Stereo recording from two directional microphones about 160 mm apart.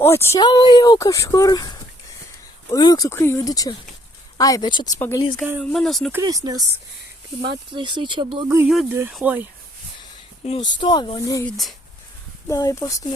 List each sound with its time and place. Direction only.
0.0 s speech: 15° left (ahead or behind)
0.3 s speech: 25° left (ahead or behind)
4.9 s speech: 15° left (ahead or behind)
5.4 s speech: centre (ahead or behind)
6.2 s speech: 25° right (ahead or behind)
8.4 s speech: 15° right (ahead or behind)
10.4 s speech: 45° left (ahead or behind)
10.8 s speech: 30° left (ahead or behind)
11.4 s speech: centre (ahead or behind)
12.5 s speech: 20° left (ahead or behind)